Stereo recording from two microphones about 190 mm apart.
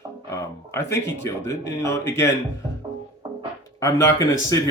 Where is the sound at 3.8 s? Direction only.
15° left (ahead or behind).